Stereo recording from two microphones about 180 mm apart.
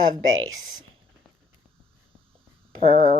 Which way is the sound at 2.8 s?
45° right (ahead or behind).